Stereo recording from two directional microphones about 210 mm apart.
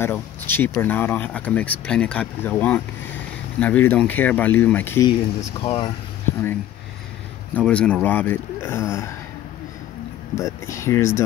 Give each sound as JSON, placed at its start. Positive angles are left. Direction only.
{"t": 0.0, "sound": "speech", "side_deg": 10}
{"t": 5.6, "sound": "speech", "side_deg": 30}
{"t": 7.5, "sound": "speech", "side_deg": 5}
{"t": 10.3, "sound": "speech", "side_deg": 15}